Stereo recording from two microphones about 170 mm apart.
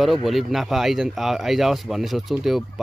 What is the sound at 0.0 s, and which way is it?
Speech, centre (ahead or behind).